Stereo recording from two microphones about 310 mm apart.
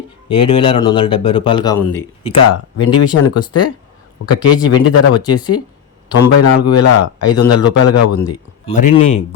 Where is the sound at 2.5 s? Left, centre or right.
Left.